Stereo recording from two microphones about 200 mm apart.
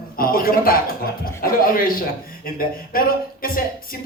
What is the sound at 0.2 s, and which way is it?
A man's voice, 45° left (ahead or behind).